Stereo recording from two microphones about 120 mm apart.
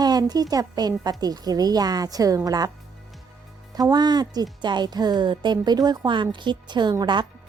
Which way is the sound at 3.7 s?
35° right (ahead or behind).